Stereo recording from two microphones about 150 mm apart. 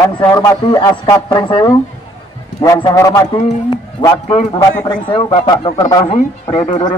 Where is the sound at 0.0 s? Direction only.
20° left (ahead or behind).